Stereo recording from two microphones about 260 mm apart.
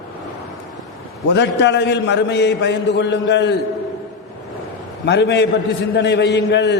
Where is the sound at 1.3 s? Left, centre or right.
Left.